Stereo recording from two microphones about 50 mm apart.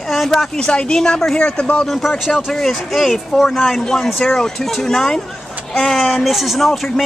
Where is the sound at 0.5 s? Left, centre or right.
Centre.